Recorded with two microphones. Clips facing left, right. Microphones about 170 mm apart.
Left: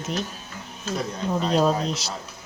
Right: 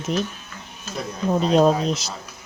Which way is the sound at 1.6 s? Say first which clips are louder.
Right 4 dB; 45° right (ahead or behind).